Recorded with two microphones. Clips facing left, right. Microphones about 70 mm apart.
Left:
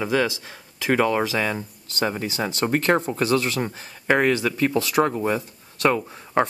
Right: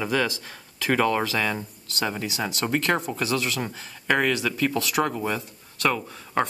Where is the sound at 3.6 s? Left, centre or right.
Left.